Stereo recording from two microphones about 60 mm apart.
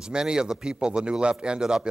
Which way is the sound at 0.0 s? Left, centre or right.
Centre.